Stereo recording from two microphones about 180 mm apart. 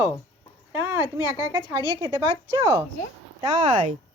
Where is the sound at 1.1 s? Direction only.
15° right (ahead or behind).